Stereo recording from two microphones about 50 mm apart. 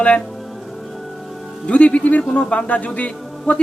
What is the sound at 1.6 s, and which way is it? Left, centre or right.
Speech, left.